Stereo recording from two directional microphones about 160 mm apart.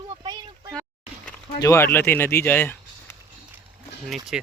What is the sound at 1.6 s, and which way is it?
Speech, 15° left (ahead or behind).